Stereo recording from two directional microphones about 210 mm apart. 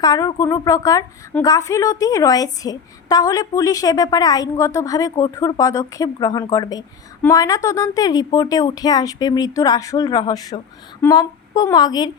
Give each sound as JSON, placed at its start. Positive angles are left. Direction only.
{"t": 0.0, "sound": "a woman's voice", "side_deg": 20}